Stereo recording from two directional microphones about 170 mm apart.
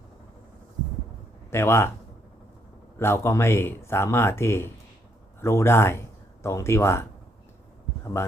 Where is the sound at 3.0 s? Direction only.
15° left (ahead or behind).